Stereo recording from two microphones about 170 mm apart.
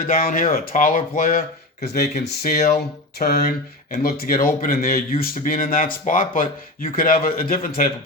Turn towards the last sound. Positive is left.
turn(degrees=55)  # may be behind; listen again after turning